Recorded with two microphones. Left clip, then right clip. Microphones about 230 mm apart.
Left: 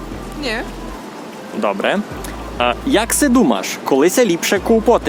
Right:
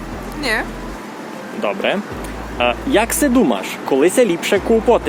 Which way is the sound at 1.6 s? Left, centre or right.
Left.